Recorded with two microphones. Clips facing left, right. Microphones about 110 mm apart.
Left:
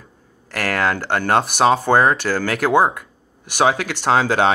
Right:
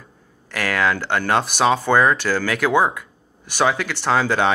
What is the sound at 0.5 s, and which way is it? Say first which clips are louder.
Speech: even; 50° left (ahead or behind).